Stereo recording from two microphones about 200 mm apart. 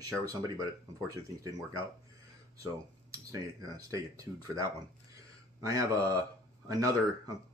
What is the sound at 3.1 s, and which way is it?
Speech, 15° right (ahead or behind).